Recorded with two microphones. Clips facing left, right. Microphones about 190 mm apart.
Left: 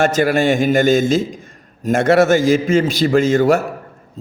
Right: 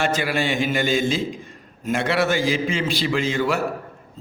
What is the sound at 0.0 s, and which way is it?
A man's voice, 45° left (ahead or behind).